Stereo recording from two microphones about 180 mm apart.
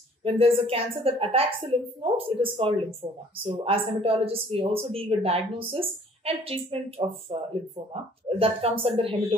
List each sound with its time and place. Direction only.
0.2 s speech: 30° right (ahead or behind)